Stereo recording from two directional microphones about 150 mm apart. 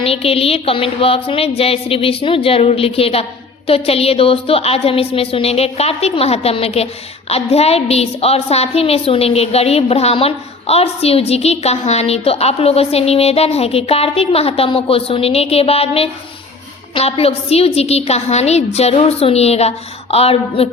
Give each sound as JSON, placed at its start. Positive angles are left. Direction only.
{"t": 0.0, "sound": "music", "side_deg": 40}
{"t": 7.3, "sound": "a woman's voice", "side_deg": 45}